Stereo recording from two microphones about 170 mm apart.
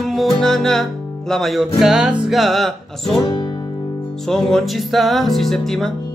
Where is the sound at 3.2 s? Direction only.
25° left (ahead or behind).